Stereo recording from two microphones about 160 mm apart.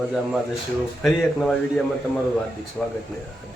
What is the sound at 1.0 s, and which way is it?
Speech, centre (ahead or behind).